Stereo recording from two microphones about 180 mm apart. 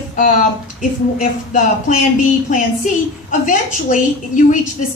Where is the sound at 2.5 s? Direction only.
45° left (ahead or behind).